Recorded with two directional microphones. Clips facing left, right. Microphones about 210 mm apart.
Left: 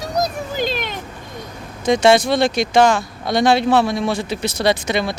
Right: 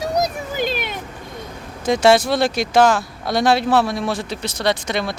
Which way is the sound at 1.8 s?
5° right (ahead or behind).